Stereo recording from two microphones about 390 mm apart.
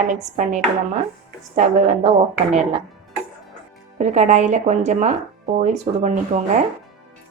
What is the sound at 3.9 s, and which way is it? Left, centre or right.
Speech, centre.